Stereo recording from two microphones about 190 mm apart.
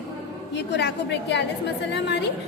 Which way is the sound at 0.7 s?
65° left (ahead or behind).